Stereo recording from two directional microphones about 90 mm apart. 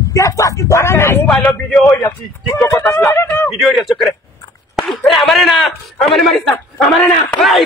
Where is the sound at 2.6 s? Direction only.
35° left (ahead or behind).